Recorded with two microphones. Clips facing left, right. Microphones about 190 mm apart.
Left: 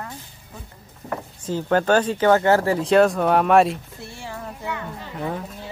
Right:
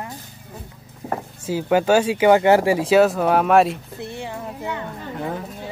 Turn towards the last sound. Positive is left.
turn(degrees=0)  # may be behind; listen again after turning